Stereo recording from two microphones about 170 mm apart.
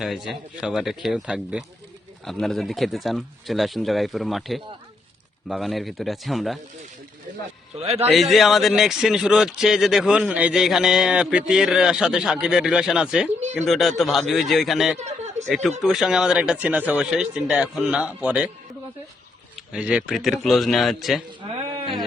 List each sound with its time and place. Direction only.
0.0 s speech: centre (ahead or behind)
7.8 s a man's voice: 35° right (ahead or behind)
8.1 s speech: centre (ahead or behind)
15.0 s a sound: 45° right (ahead or behind)
15.4 s speech: centre (ahead or behind)
19.5 s speech: 5° right (ahead or behind)